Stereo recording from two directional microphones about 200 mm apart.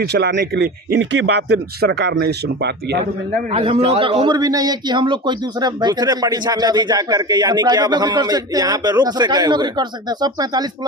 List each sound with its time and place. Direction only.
0.0 s speech: 55° right (ahead or behind)
3.5 s a man's voice: 25° right (ahead or behind)